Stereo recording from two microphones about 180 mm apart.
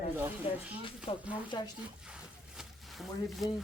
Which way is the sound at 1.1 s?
35° left (ahead or behind).